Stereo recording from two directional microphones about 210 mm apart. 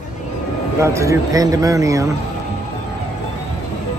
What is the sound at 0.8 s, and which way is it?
Speech, 15° right (ahead or behind).